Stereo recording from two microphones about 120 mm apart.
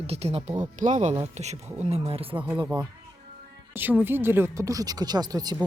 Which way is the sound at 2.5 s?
30° right (ahead or behind).